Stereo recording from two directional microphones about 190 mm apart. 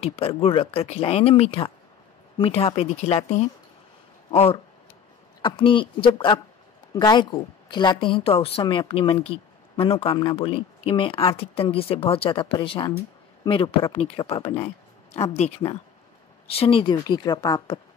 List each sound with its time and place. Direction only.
0.0 s a woman's voice: 30° left (ahead or behind)